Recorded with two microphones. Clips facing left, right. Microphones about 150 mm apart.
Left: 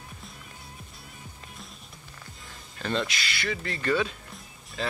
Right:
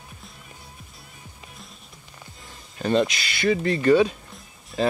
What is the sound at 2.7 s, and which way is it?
Speech, 20° right (ahead or behind).